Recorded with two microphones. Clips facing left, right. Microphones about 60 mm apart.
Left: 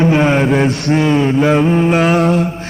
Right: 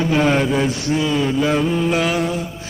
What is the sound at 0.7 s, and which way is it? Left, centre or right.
Speech, left.